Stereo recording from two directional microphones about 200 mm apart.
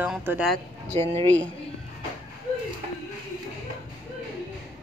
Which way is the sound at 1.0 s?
10° left (ahead or behind).